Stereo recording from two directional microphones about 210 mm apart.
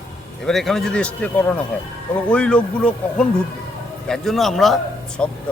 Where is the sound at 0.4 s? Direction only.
Centre (ahead or behind).